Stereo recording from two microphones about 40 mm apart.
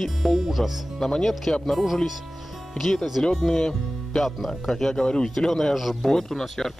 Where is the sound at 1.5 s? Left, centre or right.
Centre.